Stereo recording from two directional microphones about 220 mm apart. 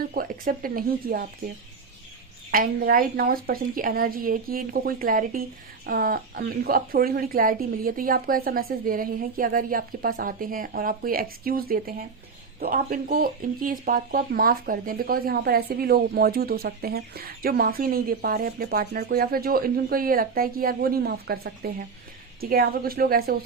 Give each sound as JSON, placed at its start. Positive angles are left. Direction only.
{"t": 0.1, "sound": "a woman's voice", "side_deg": -40}
{"t": 2.5, "sound": "a woman's voice", "side_deg": -40}